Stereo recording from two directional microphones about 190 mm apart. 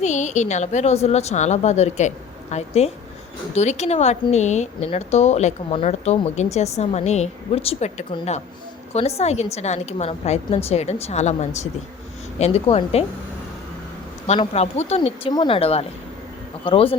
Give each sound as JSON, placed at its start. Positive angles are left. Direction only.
{"t": 0.0, "sound": "a woman's voice", "side_deg": 40}
{"t": 14.3, "sound": "a woman's voice", "side_deg": 35}